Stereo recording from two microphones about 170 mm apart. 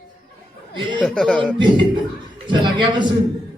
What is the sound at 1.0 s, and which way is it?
Speech, centre (ahead or behind).